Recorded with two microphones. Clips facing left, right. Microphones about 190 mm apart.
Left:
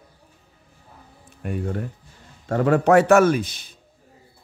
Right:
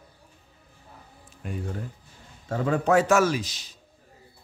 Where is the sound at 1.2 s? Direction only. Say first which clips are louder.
Left 6 dB; 55° left (ahead or behind).